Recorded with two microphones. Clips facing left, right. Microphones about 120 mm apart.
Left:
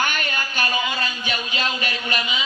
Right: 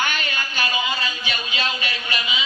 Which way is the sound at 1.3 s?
45° left (ahead or behind).